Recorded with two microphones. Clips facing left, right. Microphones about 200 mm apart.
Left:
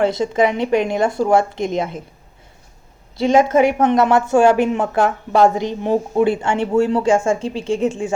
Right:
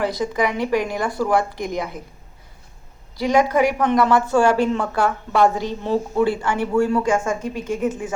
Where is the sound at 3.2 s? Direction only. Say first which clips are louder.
Left 4 dB; 25° left (ahead or behind).